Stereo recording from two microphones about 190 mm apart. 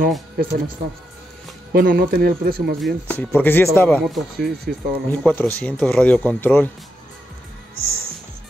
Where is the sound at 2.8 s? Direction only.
10° left (ahead or behind).